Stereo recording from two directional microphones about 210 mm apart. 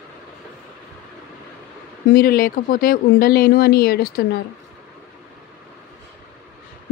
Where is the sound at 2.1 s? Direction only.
45° left (ahead or behind).